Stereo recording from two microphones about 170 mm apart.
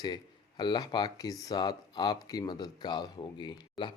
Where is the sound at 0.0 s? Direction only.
25° left (ahead or behind).